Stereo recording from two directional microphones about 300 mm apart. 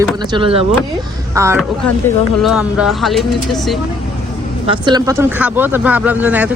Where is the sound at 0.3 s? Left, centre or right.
Centre.